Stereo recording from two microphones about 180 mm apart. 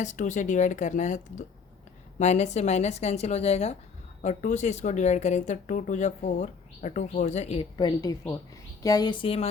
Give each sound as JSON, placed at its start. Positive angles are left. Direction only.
{"t": 0.0, "sound": "a woman's voice", "side_deg": 45}